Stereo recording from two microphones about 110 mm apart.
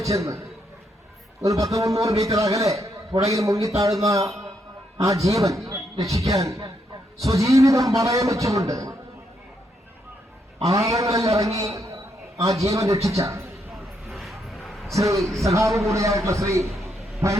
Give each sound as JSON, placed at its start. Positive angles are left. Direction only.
{"t": 0.0, "sound": "a man's voice", "side_deg": -30}
{"t": 10.6, "sound": "a man's voice", "side_deg": -30}
{"t": 13.7, "sound": "a sound", "side_deg": 0}
{"t": 14.9, "sound": "a man's voice", "side_deg": -30}
{"t": 15.2, "sound": "speech", "side_deg": 0}
{"t": 15.4, "sound": "a man's voice", "side_deg": -30}